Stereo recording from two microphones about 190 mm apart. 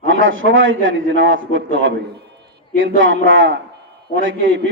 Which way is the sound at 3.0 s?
90° right.